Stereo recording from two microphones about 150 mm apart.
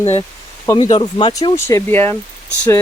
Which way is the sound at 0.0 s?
40° left (ahead or behind).